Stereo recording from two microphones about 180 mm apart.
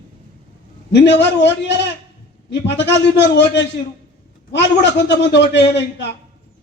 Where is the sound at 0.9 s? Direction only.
75° left (ahead or behind).